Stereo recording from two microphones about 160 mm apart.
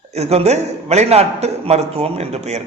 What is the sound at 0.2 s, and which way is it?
A man's voice, 40° right (ahead or behind).